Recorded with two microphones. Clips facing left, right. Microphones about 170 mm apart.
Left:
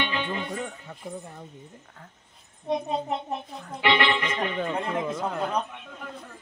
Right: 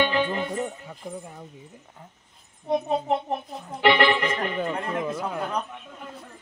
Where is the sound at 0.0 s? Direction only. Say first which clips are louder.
Right 6 dB; 40° right (ahead or behind).